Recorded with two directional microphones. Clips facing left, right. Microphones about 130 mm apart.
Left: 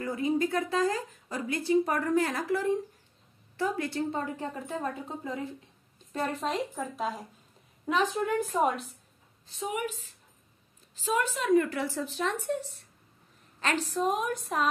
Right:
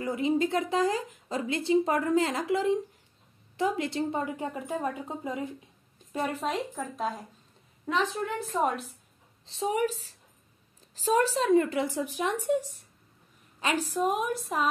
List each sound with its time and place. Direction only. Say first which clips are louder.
0.0 s speech: right 1 dB; 20° right (ahead or behind)
6.1 s a woman's voice: right 1 dB; centre (ahead or behind)
7.8 s a woman's voice: left 1 dB; 10° left (ahead or behind)
8.6 s a woman's voice: even; centre (ahead or behind)
9.5 s a woman's voice: right 5 dB; 30° right (ahead or behind); by 14.7 s centre (ahead or behind)